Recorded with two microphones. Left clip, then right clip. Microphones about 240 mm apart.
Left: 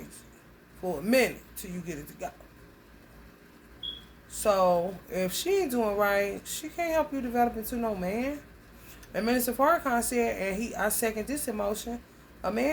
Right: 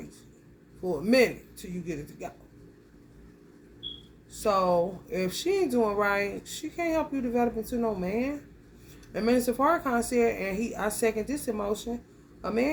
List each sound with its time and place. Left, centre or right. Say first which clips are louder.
0.9 s speech: right 2 dB; centre
4.4 s speech: even; centre